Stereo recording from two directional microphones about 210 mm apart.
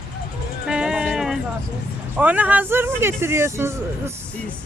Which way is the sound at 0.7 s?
5° right (ahead or behind).